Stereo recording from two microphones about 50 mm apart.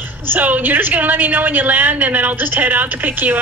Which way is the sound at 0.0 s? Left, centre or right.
Right.